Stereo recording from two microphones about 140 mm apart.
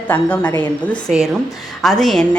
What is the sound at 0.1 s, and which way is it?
A woman's voice, 15° left (ahead or behind).